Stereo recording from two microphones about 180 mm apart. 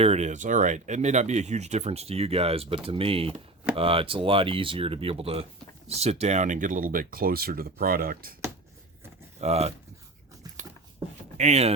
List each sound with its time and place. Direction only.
0.0 s speech: 35° right (ahead or behind); by 8.4 s 55° right (ahead or behind)
9.4 s speech: 35° right (ahead or behind)
11.3 s speech: 35° right (ahead or behind)